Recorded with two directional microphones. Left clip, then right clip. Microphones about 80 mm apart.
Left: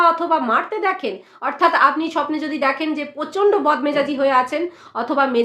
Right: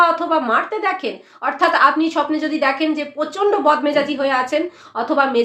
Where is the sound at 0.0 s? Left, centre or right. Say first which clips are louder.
Right 1 dB; left.